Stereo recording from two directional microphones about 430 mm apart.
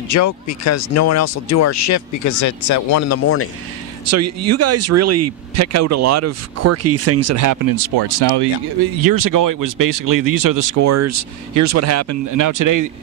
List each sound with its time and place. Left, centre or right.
0.1 s speech: left
4.1 s speech: right
8.9 s speech: right